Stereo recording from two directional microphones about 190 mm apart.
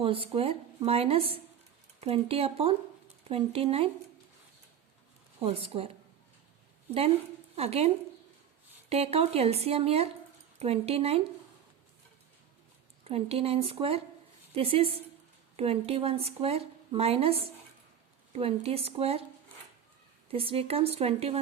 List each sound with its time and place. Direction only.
0.0 s speech: 30° right (ahead or behind)
5.4 s speech: 30° right (ahead or behind)
6.9 s a woman's voice: 30° right (ahead or behind)
13.1 s speech: 30° right (ahead or behind)
20.3 s speech: 30° right (ahead or behind)